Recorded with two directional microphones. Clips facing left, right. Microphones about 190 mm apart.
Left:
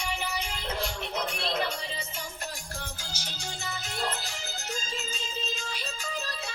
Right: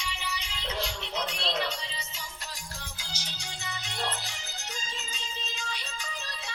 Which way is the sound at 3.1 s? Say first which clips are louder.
Left 3 dB; 45° left (ahead or behind).